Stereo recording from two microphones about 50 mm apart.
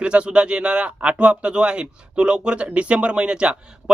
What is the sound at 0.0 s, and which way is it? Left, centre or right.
Speech, right.